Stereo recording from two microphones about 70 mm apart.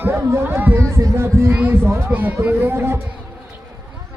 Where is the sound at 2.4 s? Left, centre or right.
Right.